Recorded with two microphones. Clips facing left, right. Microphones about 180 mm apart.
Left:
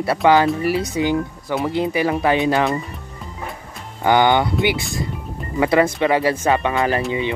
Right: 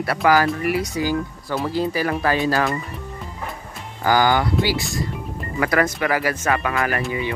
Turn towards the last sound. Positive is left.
turn(degrees=20)  # may be behind; listen again after turning